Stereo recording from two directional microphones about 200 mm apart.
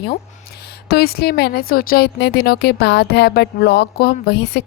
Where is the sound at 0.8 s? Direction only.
50° left (ahead or behind).